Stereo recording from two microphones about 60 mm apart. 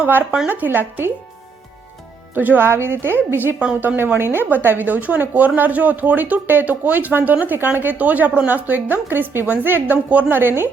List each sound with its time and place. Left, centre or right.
0.0 s speech: right
2.3 s speech: right